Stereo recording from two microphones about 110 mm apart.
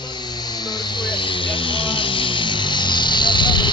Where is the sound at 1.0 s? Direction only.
45° left (ahead or behind).